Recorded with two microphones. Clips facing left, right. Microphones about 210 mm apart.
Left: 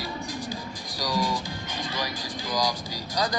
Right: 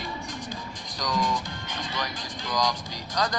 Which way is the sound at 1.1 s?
30° left (ahead or behind).